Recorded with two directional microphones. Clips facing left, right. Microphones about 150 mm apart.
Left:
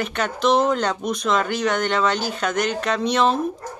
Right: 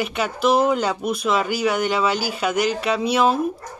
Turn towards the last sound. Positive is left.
turn(degrees=-5)  # may be behind; listen again after turning